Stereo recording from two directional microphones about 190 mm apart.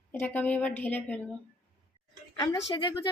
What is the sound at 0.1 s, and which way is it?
A woman's voice, 10° left (ahead or behind).